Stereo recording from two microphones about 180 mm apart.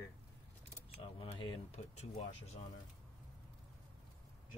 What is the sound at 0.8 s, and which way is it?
Speech, 30° left (ahead or behind).